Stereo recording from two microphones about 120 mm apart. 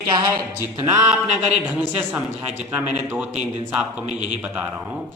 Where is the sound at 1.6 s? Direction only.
15° right (ahead or behind).